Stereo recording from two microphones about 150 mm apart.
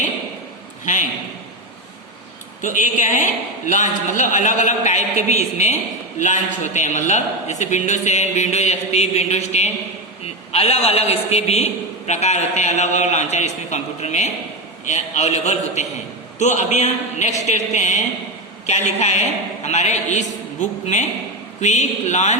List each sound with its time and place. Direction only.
0.9 s a man's voice: 55° left (ahead or behind)
2.6 s a man's voice: 55° left (ahead or behind)